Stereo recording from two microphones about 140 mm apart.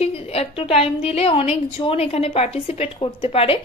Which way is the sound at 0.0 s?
45° left (ahead or behind).